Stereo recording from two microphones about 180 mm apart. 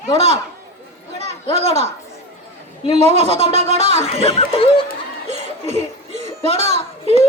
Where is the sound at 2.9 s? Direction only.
40° right (ahead or behind).